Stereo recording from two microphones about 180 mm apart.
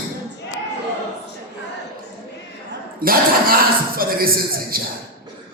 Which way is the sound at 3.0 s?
55° right (ahead or behind).